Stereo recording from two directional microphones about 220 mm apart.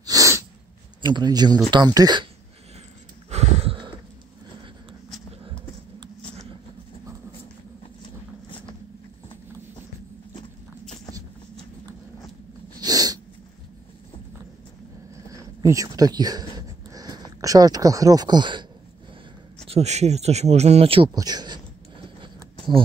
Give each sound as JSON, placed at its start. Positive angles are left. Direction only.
{"t": 0.0, "sound": "sneeze", "side_deg": -15}
{"t": 1.0, "sound": "speech", "side_deg": -20}
{"t": 3.3, "sound": "a sound", "side_deg": -30}
{"t": 12.8, "sound": "dog", "side_deg": -15}
{"t": 15.2, "sound": "a sound", "side_deg": -15}
{"t": 17.4, "sound": "speech", "side_deg": -15}
{"t": 19.7, "sound": "speech", "side_deg": -30}